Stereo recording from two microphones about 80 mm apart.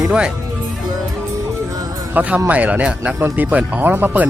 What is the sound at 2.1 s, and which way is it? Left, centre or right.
Speech, centre.